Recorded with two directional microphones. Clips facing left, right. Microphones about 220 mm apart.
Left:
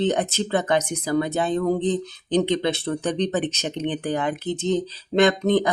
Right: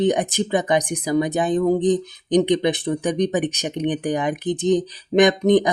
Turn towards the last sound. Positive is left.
turn(degrees=-15)  # may be behind; listen again after turning